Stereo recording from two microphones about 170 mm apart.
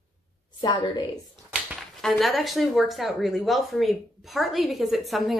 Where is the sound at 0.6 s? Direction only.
25° left (ahead or behind).